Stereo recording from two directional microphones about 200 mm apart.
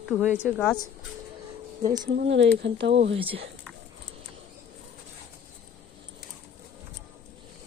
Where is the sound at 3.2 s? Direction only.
25° right (ahead or behind).